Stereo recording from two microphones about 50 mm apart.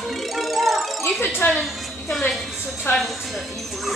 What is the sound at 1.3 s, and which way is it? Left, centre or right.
Speech, left.